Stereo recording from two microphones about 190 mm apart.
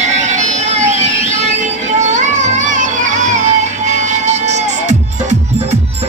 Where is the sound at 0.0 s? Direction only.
40° right (ahead or behind).